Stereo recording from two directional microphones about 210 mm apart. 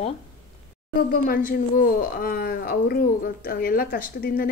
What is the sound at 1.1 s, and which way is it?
Speech, 45° left (ahead or behind).